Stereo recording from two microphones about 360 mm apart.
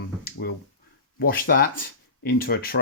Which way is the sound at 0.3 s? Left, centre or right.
Left.